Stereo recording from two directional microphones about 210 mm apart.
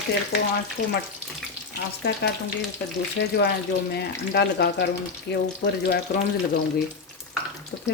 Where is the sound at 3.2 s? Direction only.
55° left (ahead or behind).